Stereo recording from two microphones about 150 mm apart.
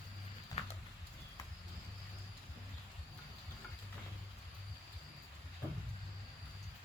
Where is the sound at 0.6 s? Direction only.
45° left (ahead or behind).